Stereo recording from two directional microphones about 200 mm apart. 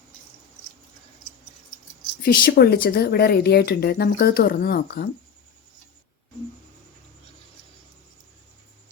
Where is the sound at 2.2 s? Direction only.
50° left (ahead or behind).